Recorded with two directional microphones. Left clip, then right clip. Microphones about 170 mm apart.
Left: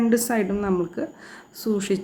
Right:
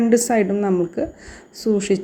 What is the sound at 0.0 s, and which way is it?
A woman's voice, 20° right (ahead or behind).